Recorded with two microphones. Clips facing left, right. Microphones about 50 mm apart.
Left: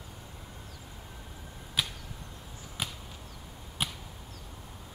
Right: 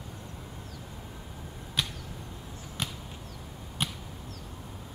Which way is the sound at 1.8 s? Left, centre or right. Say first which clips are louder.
Even; centre.